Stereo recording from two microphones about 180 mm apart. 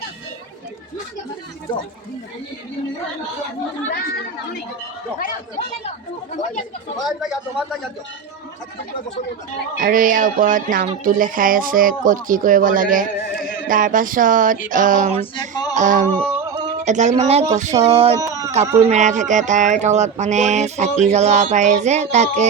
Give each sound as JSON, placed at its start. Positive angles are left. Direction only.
{"t": 7.0, "sound": "a man's voice", "side_deg": 0}
{"t": 9.7, "sound": "speech", "side_deg": -50}
{"t": 15.2, "sound": "male singing", "side_deg": 25}
{"t": 15.7, "sound": "a sound", "side_deg": -45}
{"t": 16.6, "sound": "speech", "side_deg": -40}
{"t": 18.2, "sound": "a sound", "side_deg": -20}
{"t": 18.5, "sound": "speech", "side_deg": -40}